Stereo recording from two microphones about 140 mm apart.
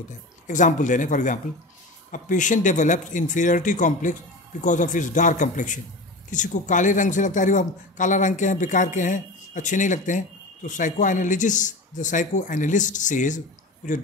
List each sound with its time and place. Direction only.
0.5 s speech: 65° left (ahead or behind)